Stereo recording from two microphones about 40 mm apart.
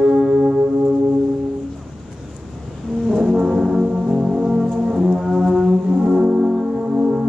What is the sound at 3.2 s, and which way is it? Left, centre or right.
Brass instrument, centre.